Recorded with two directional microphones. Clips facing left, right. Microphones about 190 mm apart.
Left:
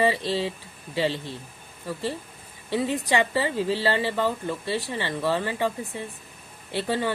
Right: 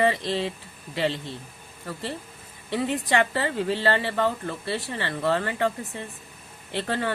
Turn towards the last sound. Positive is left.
turn(degrees=15)  # may be behind; listen again after turning